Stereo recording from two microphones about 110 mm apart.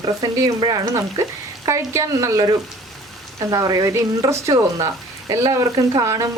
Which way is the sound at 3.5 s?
35° right (ahead or behind).